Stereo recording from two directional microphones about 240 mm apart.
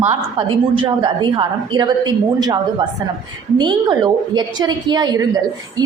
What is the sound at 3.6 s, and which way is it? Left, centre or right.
A woman's voice, centre.